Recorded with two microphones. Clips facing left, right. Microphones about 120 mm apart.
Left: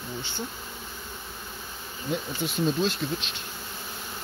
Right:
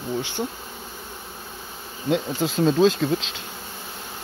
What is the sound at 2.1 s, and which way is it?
Speech, 90° right.